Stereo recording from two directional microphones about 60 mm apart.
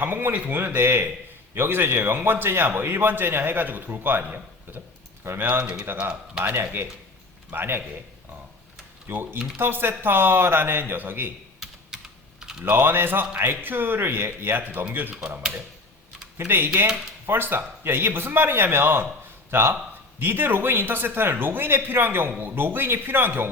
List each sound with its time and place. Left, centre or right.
0.0 s speech: right
5.2 s speech: right
9.0 s speech: right
12.6 s speech: right
16.4 s speech: right